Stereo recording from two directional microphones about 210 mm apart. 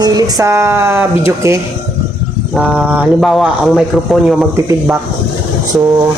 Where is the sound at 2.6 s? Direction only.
5° right (ahead or behind).